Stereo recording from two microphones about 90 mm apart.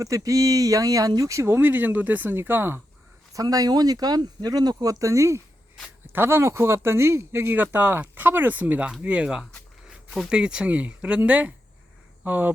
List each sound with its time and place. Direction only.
0.0 s speech: 40° right (ahead or behind)
3.3 s speech: 45° right (ahead or behind); by 12.5 s 20° right (ahead or behind)